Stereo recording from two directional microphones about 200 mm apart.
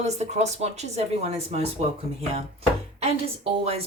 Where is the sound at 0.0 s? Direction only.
35° right (ahead or behind).